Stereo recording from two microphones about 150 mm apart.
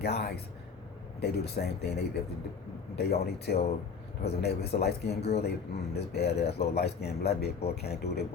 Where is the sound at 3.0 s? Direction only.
90° left.